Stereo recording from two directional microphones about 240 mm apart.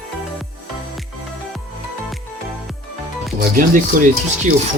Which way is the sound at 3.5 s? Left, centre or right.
Right.